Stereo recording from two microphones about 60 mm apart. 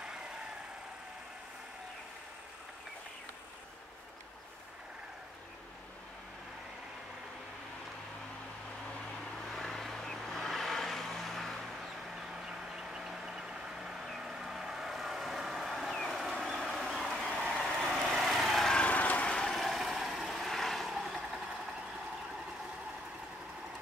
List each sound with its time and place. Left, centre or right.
9.5 s vehicle: centre
12.2 s vehicle: centre
18.8 s a sound: left
19.3 s vehicle: centre